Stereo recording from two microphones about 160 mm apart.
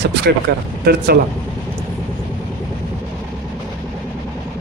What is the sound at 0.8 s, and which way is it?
Speech, 80° right.